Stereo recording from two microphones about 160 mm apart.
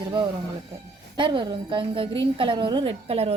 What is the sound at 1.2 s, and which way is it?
A woman's voice, 30° right (ahead or behind).